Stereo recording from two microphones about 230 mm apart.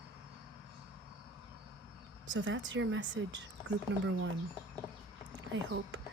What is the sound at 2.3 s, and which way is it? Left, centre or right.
Speech, right.